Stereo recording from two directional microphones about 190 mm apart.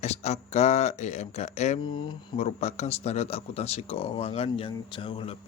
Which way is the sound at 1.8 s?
25° left (ahead or behind).